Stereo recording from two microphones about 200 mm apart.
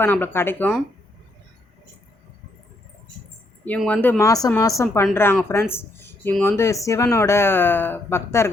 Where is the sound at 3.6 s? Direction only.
5° left (ahead or behind).